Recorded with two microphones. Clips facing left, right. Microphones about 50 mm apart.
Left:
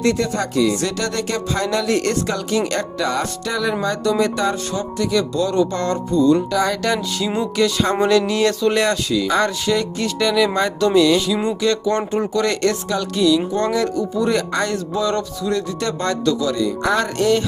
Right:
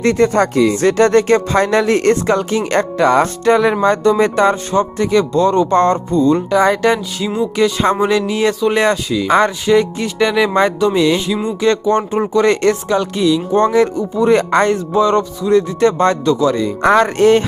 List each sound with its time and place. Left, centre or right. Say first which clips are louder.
0.0 s speech: right 7 dB; right
8.3 s speech: right 2 dB; centre; by 17.4 s right